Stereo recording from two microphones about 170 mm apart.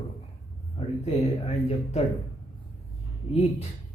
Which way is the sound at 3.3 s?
35° left (ahead or behind).